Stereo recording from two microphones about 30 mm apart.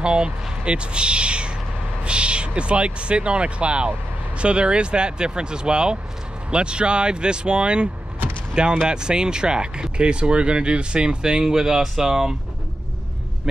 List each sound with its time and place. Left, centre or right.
0.0 s speech: right